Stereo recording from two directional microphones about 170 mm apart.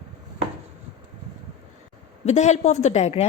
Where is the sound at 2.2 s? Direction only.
40° left (ahead or behind).